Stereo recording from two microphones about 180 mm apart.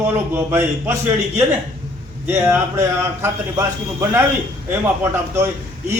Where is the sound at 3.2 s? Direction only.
15° right (ahead or behind).